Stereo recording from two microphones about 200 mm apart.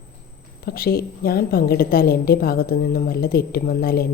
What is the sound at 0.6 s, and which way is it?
Speech, 50° left (ahead or behind).